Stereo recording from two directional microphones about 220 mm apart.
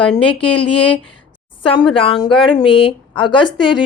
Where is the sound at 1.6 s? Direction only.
25° left (ahead or behind).